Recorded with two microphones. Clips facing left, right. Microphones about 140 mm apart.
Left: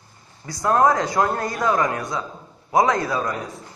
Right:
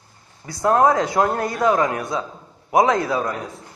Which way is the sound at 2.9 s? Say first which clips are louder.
Right 2 dB; 20° right (ahead or behind).